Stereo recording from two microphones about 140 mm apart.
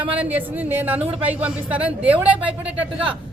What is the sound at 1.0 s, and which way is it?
Speech, 45° right (ahead or behind).